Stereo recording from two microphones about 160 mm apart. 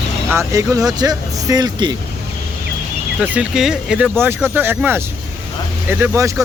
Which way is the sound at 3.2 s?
5° right (ahead or behind).